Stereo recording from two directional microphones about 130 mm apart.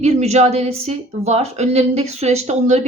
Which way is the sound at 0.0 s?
55° right (ahead or behind).